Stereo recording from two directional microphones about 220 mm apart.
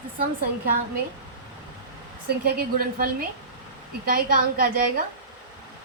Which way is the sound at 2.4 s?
40° right (ahead or behind).